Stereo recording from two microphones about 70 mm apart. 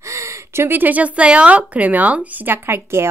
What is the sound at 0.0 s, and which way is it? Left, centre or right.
A woman's voice, right.